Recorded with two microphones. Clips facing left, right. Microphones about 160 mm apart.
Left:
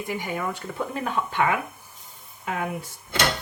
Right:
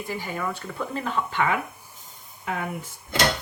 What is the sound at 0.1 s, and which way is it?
Speech, 15° left (ahead or behind).